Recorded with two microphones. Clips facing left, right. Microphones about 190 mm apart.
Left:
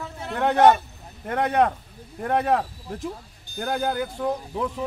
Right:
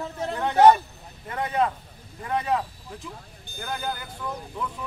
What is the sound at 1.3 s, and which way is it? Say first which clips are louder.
Speech: left 4 dB; 65° left (ahead or behind).